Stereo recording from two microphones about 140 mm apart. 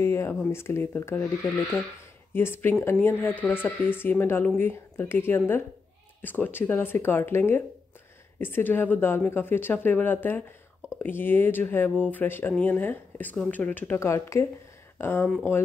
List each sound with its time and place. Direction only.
0.0 s speech: 20° left (ahead or behind)
2.3 s speech: 15° left (ahead or behind)